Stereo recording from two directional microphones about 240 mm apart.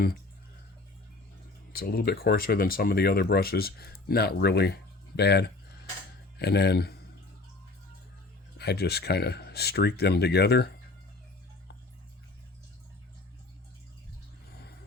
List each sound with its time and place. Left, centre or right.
1.7 s speech: left
8.5 s speech: left